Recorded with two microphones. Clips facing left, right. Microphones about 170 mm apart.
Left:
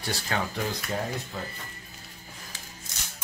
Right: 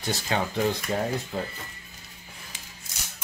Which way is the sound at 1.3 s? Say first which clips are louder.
Right 5 dB; 30° right (ahead or behind).